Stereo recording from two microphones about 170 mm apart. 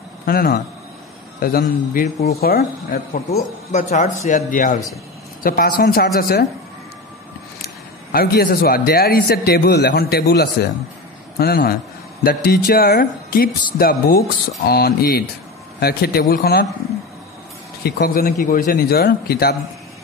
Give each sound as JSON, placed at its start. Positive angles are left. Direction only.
{"t": 0.2, "sound": "a man's voice", "side_deg": 60}
{"t": 3.7, "sound": "a man's voice", "side_deg": 45}
{"t": 7.6, "sound": "a man's voice", "side_deg": 60}
{"t": 17.8, "sound": "a man's voice", "side_deg": 65}